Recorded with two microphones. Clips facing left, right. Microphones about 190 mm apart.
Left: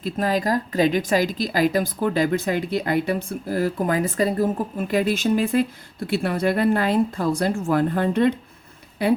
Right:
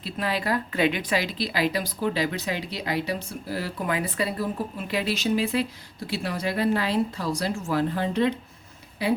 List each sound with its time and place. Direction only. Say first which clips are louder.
0.0 s a woman's voice: left 6 dB; 45° left (ahead or behind)